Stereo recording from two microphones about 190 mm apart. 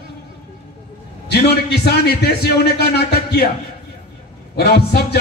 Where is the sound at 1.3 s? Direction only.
60° left (ahead or behind).